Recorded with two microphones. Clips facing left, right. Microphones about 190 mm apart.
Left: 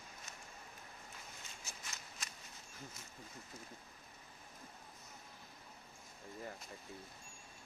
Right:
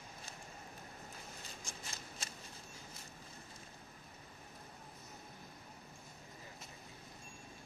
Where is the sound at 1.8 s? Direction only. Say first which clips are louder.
Right 3 dB; 30° right (ahead or behind).